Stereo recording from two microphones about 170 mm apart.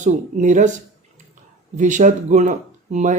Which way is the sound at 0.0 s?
45° right (ahead or behind).